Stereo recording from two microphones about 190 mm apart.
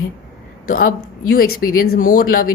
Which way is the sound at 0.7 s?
50° left (ahead or behind).